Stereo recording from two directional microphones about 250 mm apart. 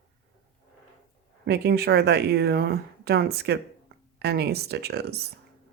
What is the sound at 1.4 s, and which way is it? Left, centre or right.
Speech, right.